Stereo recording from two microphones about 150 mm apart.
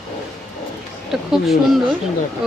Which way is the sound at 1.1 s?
Centre (ahead or behind).